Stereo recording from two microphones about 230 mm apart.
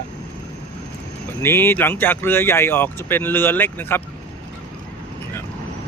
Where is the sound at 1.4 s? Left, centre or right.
Centre.